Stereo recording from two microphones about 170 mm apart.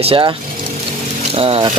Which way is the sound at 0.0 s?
30° right (ahead or behind).